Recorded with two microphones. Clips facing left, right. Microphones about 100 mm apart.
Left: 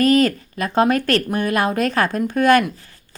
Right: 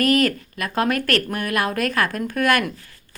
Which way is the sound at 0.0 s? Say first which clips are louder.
Left 3 dB; 25° left (ahead or behind).